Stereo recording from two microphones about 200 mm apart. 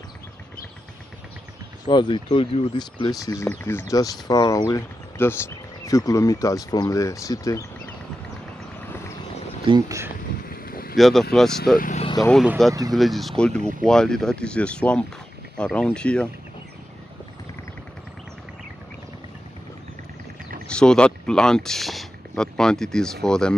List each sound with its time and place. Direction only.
1.9 s speech: 25° left (ahead or behind)
9.7 s speech: 15° right (ahead or behind)
10.4 s boat: 45° left (ahead or behind)
11.0 s speech: centre (ahead or behind)
11.8 s speech: 35° left (ahead or behind)
12.4 s speech: centre (ahead or behind)
20.6 s speech: 5° left (ahead or behind)